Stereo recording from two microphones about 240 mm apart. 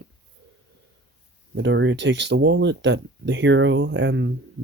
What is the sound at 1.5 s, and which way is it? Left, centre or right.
Speech, right.